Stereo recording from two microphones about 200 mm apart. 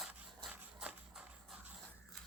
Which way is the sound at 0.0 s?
5° right (ahead or behind).